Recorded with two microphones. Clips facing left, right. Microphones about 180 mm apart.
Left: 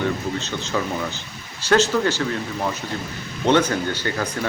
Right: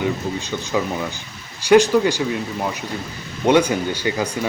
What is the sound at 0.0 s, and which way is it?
Speech, 15° right (ahead or behind).